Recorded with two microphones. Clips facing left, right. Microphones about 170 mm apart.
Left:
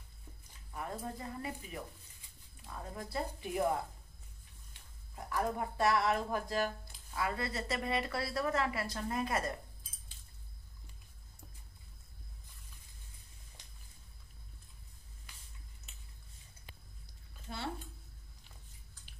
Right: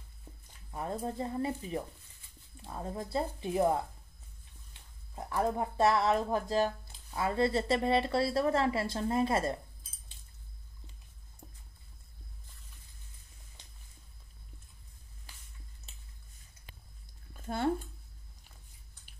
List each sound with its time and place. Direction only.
0.7 s speech: 25° right (ahead or behind)
5.1 s speech: 25° right (ahead or behind)
17.5 s a sound: 50° right (ahead or behind)